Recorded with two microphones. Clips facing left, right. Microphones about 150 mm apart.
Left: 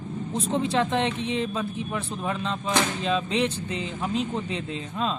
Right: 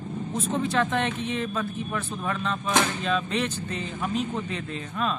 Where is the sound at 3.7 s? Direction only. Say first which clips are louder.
Left 1 dB; 20° left (ahead or behind).